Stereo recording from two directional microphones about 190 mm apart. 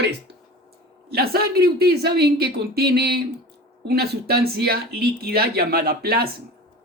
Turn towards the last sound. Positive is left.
turn(degrees=-55)  # may be behind; listen again after turning